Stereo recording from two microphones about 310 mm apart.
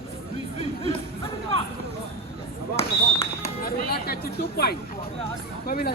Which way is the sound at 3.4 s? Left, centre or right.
Left.